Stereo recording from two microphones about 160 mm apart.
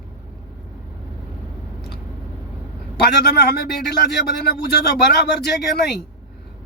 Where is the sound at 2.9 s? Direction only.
85° left.